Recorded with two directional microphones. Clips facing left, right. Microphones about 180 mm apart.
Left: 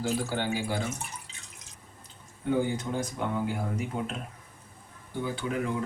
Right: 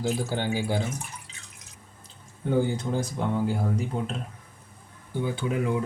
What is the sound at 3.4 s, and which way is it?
Speech, 30° right (ahead or behind).